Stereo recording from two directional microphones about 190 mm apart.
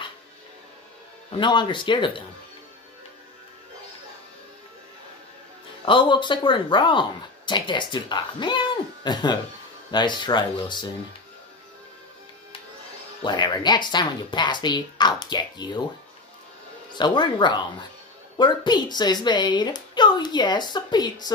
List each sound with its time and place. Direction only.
1.3 s a woman's voice: 25° left (ahead or behind)
5.9 s a woman's voice: 25° left (ahead or behind)
13.2 s a woman's voice: 25° left (ahead or behind)
16.9 s a woman's voice: 25° left (ahead or behind)